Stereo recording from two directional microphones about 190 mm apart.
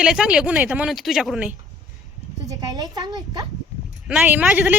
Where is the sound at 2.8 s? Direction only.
20° right (ahead or behind).